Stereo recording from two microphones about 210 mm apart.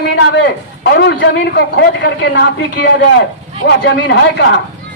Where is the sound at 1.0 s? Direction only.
55° left (ahead or behind).